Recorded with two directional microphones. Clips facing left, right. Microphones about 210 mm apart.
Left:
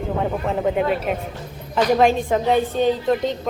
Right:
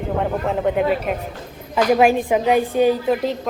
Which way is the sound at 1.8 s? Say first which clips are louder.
Right 1 dB; 10° right (ahead or behind).